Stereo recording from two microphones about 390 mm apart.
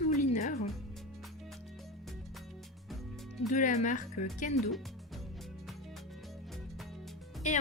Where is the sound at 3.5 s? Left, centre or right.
Centre.